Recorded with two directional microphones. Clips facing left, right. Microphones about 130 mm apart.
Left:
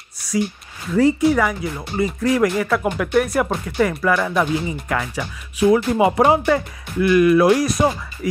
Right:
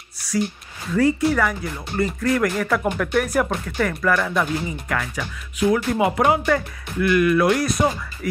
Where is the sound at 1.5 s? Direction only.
5° left (ahead or behind).